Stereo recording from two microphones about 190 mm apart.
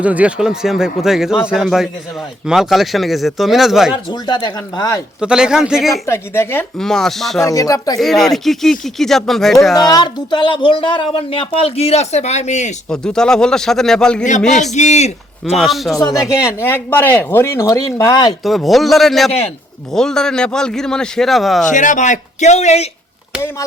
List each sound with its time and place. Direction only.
0.0 s a man's voice: 5° right (ahead or behind)
4.1 s speech: 20° left (ahead or behind)
5.2 s a man's voice: 5° right (ahead or behind)
6.1 s a man's voice: 15° left (ahead or behind)
7.4 s speech: 15° left (ahead or behind)
7.9 s a man's voice: centre (ahead or behind)
9.7 s speech: 20° left (ahead or behind); by 12.7 s 35° left (ahead or behind)
12.9 s a man's voice: 5° left (ahead or behind)
14.7 s speech: 35° left (ahead or behind)
15.5 s a man's voice: centre (ahead or behind)
16.0 s speech: 20° left (ahead or behind)
18.4 s a man's voice: centre (ahead or behind)
21.7 s speech: 40° left (ahead or behind)